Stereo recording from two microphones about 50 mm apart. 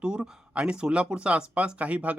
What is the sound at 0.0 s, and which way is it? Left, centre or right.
Speech, centre.